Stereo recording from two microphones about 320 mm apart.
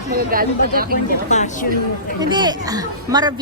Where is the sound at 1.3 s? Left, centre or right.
Left.